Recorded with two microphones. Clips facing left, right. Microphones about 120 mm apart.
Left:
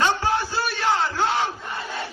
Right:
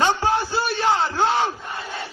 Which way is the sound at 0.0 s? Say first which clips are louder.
Right 2 dB; 25° right (ahead or behind).